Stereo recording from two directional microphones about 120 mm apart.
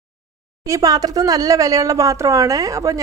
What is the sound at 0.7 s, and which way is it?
A woman's voice, 30° right (ahead or behind).